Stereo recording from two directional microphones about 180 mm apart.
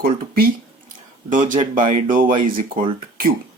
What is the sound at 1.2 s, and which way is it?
Speech, 45° right (ahead or behind).